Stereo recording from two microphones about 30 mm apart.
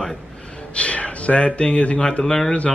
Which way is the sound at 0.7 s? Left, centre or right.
Left.